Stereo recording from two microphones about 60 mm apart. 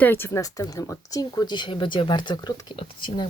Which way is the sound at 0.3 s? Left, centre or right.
Left.